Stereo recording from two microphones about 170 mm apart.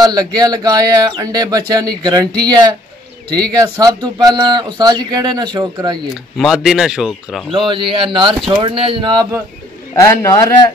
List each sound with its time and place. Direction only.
0.0 s speech: 25° right (ahead or behind)
6.3 s speech: centre (ahead or behind)
7.5 s speech: 30° right (ahead or behind)
9.9 s a man's voice: 20° left (ahead or behind)